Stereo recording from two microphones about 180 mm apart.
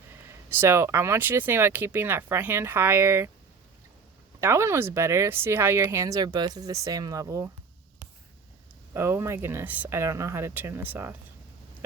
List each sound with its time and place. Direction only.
0.5 s speech: 15° right (ahead or behind)
4.4 s speech: 15° right (ahead or behind)
8.9 s speech: 15° right (ahead or behind)